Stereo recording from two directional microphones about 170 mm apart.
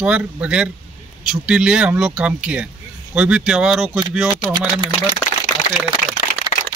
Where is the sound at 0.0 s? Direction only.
5° right (ahead or behind).